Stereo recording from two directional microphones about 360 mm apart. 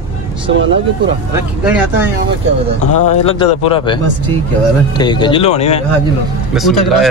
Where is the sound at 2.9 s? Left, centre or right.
Left.